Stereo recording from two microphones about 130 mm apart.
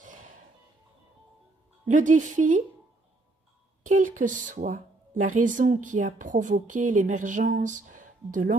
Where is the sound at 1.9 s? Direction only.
75° right (ahead or behind).